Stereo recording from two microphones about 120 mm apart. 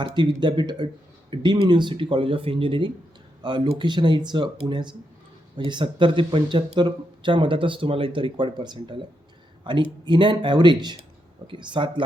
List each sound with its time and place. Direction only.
0.0 s speech: 40° right (ahead or behind)